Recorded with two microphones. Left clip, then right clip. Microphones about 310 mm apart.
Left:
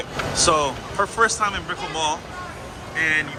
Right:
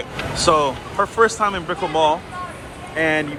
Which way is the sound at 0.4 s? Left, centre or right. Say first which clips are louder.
Right 4 dB; centre.